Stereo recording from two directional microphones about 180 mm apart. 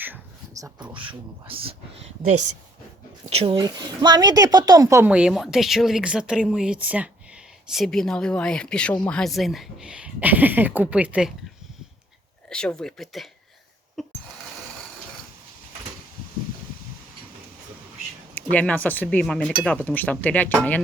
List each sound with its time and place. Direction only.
0.0 s a sound: 15° right (ahead or behind)
0.9 s speech: 30° right (ahead or behind)
3.2 s a woman's voice: 30° right (ahead or behind); by 11.3 s 5° right (ahead or behind)
12.5 s a woman's voice: 5° left (ahead or behind)
14.0 s a sound: centre (ahead or behind)
18.5 s speech: 10° left (ahead or behind)